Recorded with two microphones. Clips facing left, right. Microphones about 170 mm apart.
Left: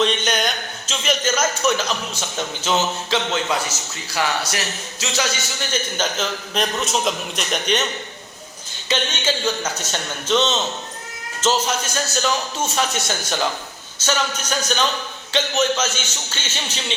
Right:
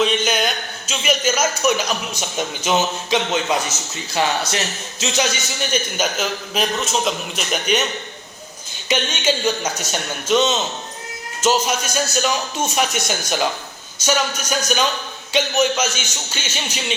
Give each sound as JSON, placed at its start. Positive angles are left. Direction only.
{"t": 0.0, "sound": "speech", "side_deg": -5}
{"t": 8.9, "sound": "speech", "side_deg": -15}